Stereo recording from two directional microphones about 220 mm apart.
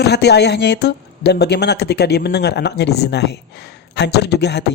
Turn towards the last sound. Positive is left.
turn(degrees=50)  # may be behind; listen again after turning